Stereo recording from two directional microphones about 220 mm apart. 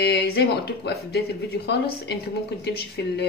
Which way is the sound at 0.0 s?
50° left (ahead or behind).